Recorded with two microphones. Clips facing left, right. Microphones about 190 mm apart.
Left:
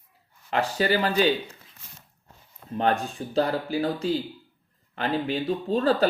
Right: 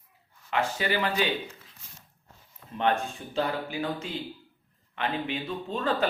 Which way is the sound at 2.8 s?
40° left (ahead or behind).